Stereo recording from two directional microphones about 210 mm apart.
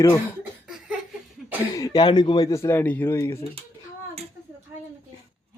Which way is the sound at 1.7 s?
20° left (ahead or behind).